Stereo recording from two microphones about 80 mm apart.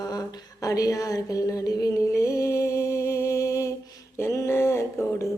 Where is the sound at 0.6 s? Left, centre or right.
Left.